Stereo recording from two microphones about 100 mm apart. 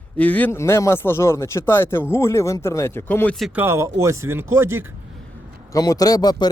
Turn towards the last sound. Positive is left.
turn(degrees=45)  # may be behind; listen again after turning